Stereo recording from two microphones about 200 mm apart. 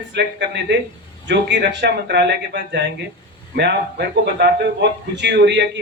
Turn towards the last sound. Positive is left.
turn(degrees=-60)  # may be behind; listen again after turning